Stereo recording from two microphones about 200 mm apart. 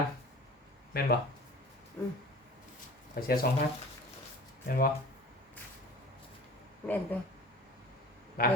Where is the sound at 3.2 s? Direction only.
50° left (ahead or behind).